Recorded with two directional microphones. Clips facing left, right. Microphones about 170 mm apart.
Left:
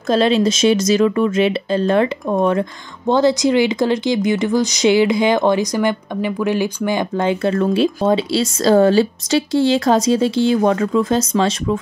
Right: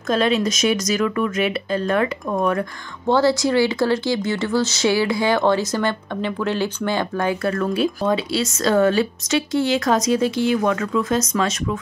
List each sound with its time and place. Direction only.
0.1 s speech: 30° left (ahead or behind)